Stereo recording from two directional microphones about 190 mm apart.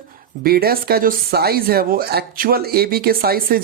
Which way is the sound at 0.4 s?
55° right (ahead or behind).